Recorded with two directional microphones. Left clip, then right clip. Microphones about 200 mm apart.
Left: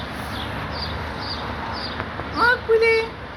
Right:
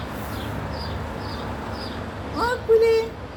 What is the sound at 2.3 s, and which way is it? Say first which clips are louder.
Speech: left 2 dB; 15° right (ahead or behind).